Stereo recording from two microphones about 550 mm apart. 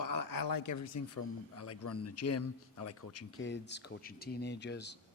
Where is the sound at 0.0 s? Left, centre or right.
Left.